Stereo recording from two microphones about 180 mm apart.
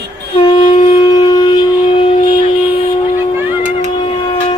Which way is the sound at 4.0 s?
25° left (ahead or behind).